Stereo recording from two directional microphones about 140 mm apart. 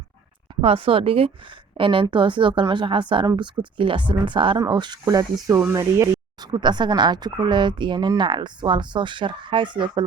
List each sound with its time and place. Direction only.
0.6 s speech: 40° right (ahead or behind)